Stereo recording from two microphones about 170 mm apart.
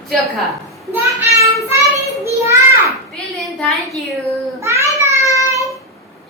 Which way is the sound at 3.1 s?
5° left (ahead or behind).